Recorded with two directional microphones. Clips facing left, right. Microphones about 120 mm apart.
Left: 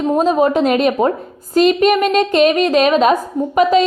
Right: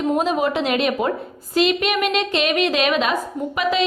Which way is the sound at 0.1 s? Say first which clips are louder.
Left 8 dB; 40° left (ahead or behind).